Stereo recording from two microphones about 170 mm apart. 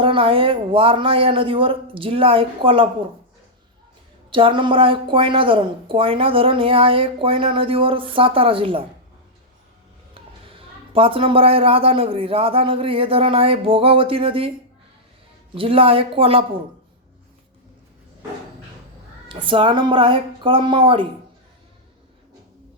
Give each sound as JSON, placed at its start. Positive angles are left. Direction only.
{"t": 0.0, "sound": "a woman's voice", "side_deg": -30}
{"t": 4.3, "sound": "a woman's voice", "side_deg": -30}
{"t": 10.2, "sound": "a woman's voice", "side_deg": -30}
{"t": 15.5, "sound": "a woman's voice", "side_deg": -35}
{"t": 19.3, "sound": "speech", "side_deg": -30}